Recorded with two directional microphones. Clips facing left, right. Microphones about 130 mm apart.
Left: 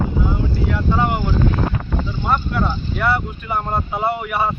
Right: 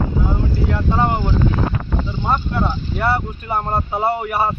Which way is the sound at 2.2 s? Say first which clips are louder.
Even; 25° right (ahead or behind).